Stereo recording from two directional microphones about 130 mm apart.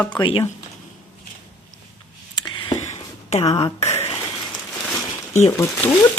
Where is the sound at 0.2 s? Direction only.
45° left (ahead or behind).